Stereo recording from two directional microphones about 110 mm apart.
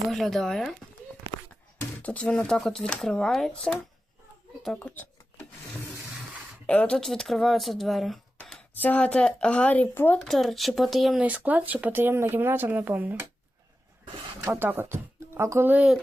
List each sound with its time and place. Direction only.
0.1 s speech: 5° left (ahead or behind)
2.0 s speech: 10° left (ahead or behind)
4.8 s a sound: 15° left (ahead or behind)
6.7 s speech: 10° left (ahead or behind)
8.7 s speech: 15° left (ahead or behind)
10.2 s speech: centre (ahead or behind)
11.2 s speech: 15° right (ahead or behind)
14.4 s speech: 20° right (ahead or behind)
15.7 s speech: 10° right (ahead or behind)